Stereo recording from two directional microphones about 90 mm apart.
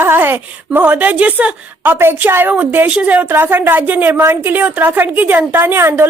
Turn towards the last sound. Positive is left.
turn(degrees=-25)  # may be behind; listen again after turning